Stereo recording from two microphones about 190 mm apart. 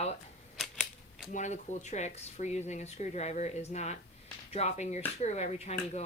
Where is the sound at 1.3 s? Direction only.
40° left (ahead or behind).